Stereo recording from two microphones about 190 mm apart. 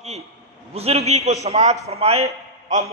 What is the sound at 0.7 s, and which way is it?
A man's voice, 35° right (ahead or behind).